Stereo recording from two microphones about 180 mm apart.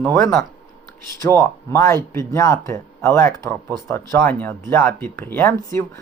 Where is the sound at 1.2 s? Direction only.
15° left (ahead or behind).